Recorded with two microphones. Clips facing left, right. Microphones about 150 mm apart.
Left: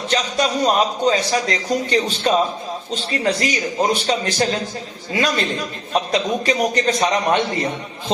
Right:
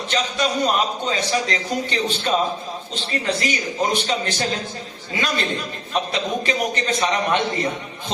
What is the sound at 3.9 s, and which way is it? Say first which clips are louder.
Speech: left 3 dB; 35° left (ahead or behind).